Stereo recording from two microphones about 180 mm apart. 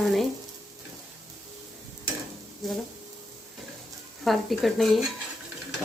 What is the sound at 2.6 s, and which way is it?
Speech, centre (ahead or behind).